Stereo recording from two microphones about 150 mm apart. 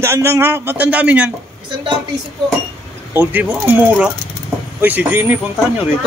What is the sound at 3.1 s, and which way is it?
Speech, 10° right (ahead or behind).